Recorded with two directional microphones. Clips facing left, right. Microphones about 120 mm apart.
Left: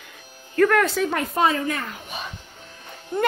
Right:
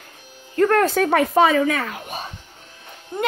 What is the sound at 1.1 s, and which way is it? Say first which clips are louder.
Speech: right 6 dB; 90° right.